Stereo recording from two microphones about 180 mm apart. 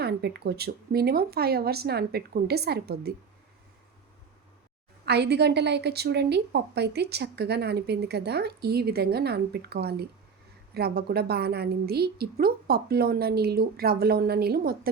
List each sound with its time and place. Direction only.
0.0 s a woman's voice: 65° right (ahead or behind)
5.0 s a woman's voice: 65° right (ahead or behind)